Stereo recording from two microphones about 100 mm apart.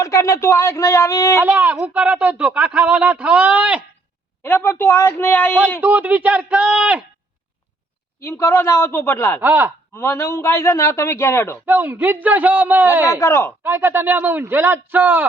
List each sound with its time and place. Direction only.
0.0 s speech: 30° left (ahead or behind)
1.5 s speech: 15° right (ahead or behind)
4.4 s a man's voice: 20° left (ahead or behind)
5.8 s speech: 15° right (ahead or behind)
8.2 s a man's voice: 25° left (ahead or behind)
9.4 s a man's voice: 20° right (ahead or behind)
9.9 s a man's voice: 25° left (ahead or behind)
11.6 s speech: 20° right (ahead or behind)
13.1 s a man's voice: 30° left (ahead or behind)
13.7 s a man's voice: 20° right (ahead or behind)